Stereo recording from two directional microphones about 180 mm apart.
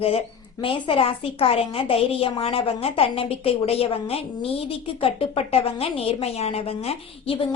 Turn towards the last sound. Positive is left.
turn(degrees=30)  # may be behind; listen again after turning